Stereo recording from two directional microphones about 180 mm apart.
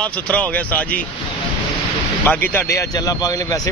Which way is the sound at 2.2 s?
10° left (ahead or behind).